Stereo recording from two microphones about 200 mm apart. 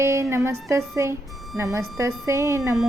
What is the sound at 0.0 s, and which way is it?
A woman's voice, 15° right (ahead or behind).